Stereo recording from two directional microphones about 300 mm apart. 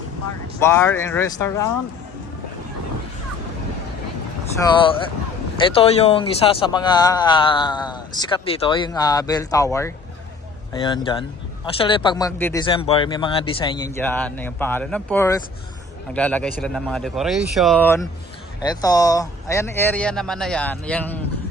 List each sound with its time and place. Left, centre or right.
0.6 s a man's voice: centre
4.6 s a man's voice: centre